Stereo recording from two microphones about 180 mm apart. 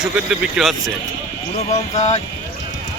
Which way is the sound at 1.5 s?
40° left (ahead or behind).